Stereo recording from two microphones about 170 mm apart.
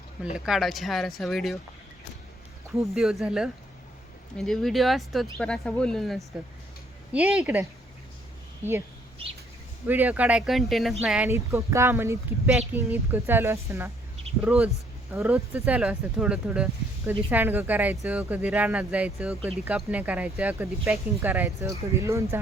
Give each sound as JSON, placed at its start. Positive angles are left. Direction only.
{"t": 0.3, "sound": "speech", "side_deg": 0}
{"t": 2.9, "sound": "speech", "side_deg": 0}
{"t": 9.8, "sound": "speech", "side_deg": -10}
{"t": 11.3, "sound": "speech", "side_deg": -15}
{"t": 14.3, "sound": "a sound", "side_deg": -35}
{"t": 15.1, "sound": "speech", "side_deg": -15}